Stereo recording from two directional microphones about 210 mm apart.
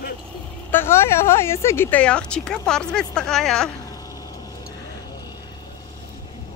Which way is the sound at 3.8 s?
15° left (ahead or behind).